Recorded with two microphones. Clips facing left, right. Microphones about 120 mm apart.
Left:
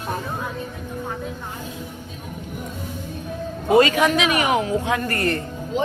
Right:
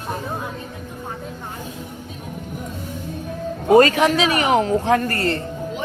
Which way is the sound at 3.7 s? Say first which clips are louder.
Right 3 dB; 40° right (ahead or behind).